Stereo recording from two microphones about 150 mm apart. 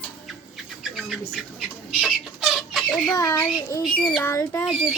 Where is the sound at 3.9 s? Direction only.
10° left (ahead or behind).